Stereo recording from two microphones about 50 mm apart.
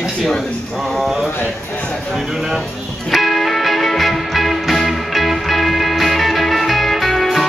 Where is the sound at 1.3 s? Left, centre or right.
Left.